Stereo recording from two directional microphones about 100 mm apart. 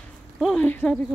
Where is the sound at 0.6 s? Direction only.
15° left (ahead or behind).